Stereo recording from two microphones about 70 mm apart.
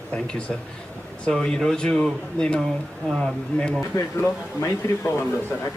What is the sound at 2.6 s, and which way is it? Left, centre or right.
Speech, centre.